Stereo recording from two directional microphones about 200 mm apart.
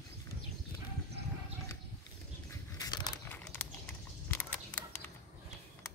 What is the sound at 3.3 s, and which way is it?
Crumpling, 10° left (ahead or behind).